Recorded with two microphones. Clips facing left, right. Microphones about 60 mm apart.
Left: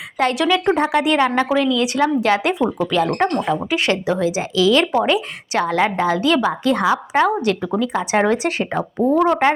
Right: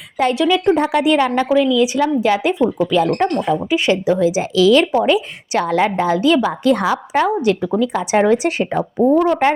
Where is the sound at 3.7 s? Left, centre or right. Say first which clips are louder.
Right 5 dB; left.